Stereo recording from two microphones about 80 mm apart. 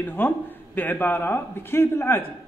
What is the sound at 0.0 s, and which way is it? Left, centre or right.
Speech, left.